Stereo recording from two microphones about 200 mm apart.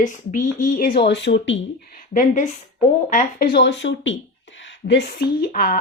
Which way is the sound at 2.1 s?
40° left (ahead or behind).